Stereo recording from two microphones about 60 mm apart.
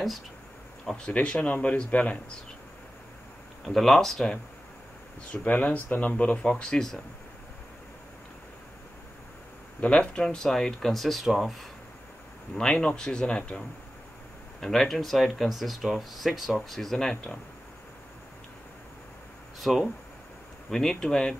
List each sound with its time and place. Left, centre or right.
0.8 s speech: centre
3.6 s speech: centre
5.3 s speech: left
9.8 s speech: centre
12.5 s speech: centre
14.6 s speech: centre
19.6 s speech: centre